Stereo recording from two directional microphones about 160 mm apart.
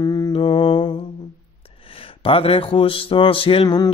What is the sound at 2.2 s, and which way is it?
Speech, 35° left (ahead or behind).